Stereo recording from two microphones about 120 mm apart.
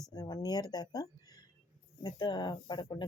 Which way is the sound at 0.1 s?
30° left (ahead or behind).